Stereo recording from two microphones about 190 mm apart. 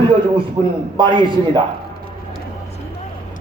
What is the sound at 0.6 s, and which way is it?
Speech, 20° right (ahead or behind).